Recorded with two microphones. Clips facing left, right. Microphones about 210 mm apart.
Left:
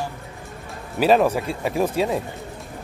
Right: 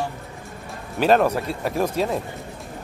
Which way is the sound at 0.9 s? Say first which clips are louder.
Left 1 dB; 5° left (ahead or behind).